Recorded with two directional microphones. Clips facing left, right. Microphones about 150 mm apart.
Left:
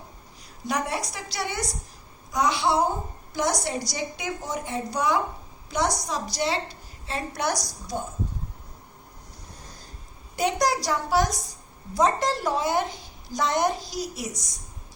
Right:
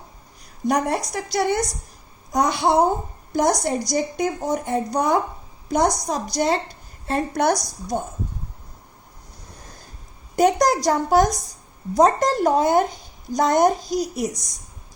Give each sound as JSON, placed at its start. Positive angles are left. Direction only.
{"t": 0.7, "sound": "speech", "side_deg": -50}
{"t": 10.3, "sound": "speech", "side_deg": -45}